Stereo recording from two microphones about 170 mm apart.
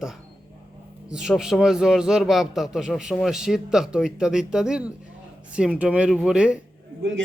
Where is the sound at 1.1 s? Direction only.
5° right (ahead or behind).